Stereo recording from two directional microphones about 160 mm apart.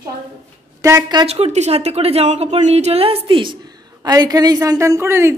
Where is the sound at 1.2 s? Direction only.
40° right (ahead or behind); by 5.3 s 15° right (ahead or behind).